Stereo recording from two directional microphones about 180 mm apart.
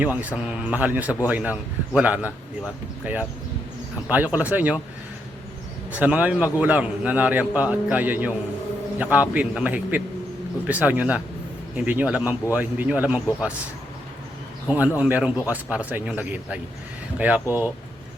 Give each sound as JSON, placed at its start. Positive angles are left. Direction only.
{"t": 0.0, "sound": "a man's voice", "side_deg": -10}
{"t": 5.9, "sound": "a man's voice", "side_deg": -10}
{"t": 14.7, "sound": "a man's voice", "side_deg": -10}